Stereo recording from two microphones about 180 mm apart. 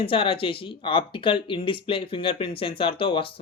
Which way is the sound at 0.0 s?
30° left (ahead or behind).